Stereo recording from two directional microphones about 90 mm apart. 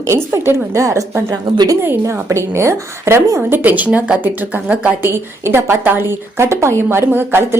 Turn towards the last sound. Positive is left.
turn(degrees=-25)  # may be behind; listen again after turning